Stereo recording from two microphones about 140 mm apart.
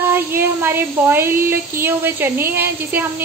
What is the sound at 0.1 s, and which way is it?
Speech, 15° right (ahead or behind).